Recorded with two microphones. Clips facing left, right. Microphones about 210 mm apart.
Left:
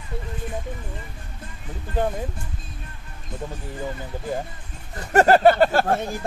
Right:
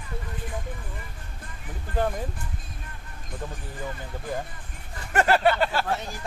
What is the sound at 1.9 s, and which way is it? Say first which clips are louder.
Speech: left 2 dB; 25° left (ahead or behind).